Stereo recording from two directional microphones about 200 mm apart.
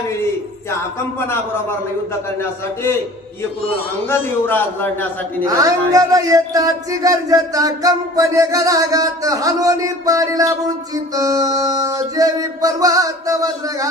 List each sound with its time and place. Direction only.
4.1 s a man's voice: 10° left (ahead or behind)
5.5 s speech: 20° right (ahead or behind)